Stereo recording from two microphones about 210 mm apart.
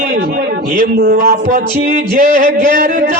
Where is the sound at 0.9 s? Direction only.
45° right (ahead or behind).